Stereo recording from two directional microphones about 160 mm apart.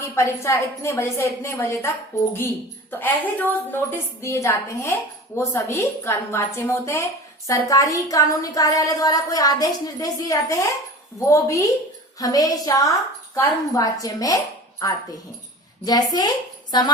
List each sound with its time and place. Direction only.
0.0 s a woman's voice: 15° left (ahead or behind)
2.9 s a woman's voice: 10° left (ahead or behind)
15.8 s a woman's voice: 25° left (ahead or behind)